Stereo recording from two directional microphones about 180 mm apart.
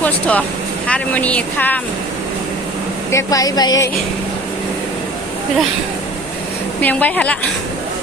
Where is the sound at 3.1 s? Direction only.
20° left (ahead or behind).